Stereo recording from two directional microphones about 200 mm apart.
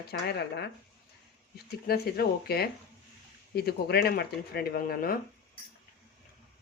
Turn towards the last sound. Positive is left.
turn(degrees=45)  # may be behind; listen again after turning